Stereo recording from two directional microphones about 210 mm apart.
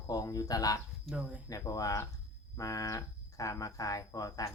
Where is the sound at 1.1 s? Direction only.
5° right (ahead or behind).